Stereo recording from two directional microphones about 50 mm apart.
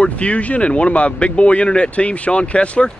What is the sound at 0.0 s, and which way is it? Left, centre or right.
Speech, left.